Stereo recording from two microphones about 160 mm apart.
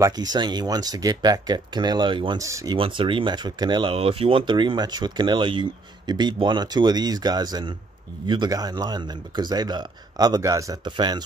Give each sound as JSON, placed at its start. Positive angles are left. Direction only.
{"t": 0.0, "sound": "speech", "side_deg": -25}